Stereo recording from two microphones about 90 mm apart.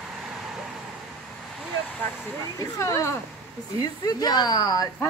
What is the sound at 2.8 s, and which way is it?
Speech, 35° left (ahead or behind).